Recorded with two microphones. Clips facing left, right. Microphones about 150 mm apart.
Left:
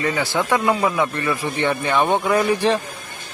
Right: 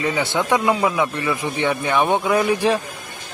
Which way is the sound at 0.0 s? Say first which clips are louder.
Even; 15° right (ahead or behind).